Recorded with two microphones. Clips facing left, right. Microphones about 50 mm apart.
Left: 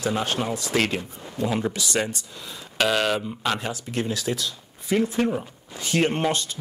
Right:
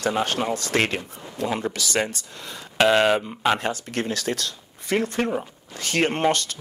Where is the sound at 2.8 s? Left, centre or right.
Right.